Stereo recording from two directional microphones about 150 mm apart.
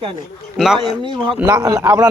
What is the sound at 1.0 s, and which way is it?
Speech, 30° right (ahead or behind).